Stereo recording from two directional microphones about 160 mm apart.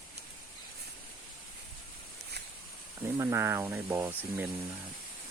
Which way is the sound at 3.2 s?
15° right (ahead or behind).